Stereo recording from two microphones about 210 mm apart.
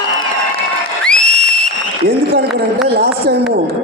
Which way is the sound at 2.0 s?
50° right (ahead or behind).